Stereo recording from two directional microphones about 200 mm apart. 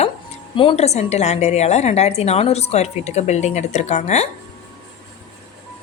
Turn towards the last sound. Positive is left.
turn(degrees=35)  # may be behind; listen again after turning